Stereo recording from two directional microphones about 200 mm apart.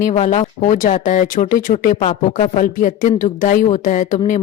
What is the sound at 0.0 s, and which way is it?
A woman's voice, 35° left (ahead or behind).